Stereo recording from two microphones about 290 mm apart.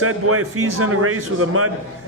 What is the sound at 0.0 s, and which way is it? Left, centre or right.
A man's voice, right.